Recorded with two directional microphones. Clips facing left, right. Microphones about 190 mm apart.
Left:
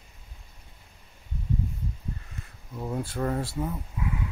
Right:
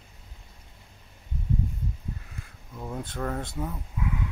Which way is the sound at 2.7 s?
10° left (ahead or behind).